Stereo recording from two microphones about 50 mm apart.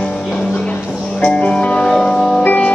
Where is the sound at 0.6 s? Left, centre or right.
Centre.